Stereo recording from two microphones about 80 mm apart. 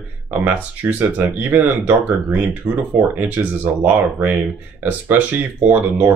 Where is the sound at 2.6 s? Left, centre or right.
Right.